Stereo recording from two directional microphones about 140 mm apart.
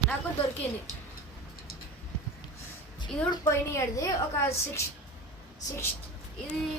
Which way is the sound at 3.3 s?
20° left (ahead or behind).